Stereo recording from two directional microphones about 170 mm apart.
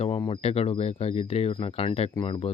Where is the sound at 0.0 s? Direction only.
35° left (ahead or behind).